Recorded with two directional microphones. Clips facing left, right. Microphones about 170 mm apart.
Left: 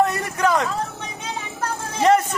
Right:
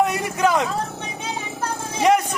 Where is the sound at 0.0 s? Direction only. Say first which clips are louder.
Even; 15° right (ahead or behind).